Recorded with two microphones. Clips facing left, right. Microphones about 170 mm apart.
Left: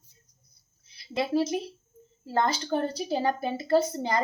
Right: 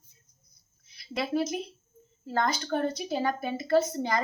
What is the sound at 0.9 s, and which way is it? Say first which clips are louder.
A woman's voice: left 3 dB; 25° left (ahead or behind).